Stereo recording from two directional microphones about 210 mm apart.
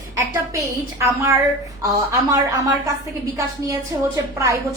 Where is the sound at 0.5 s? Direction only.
15° right (ahead or behind).